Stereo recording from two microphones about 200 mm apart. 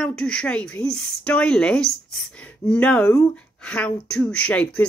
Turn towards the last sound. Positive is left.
turn(degrees=5)  # may be behind; listen again after turning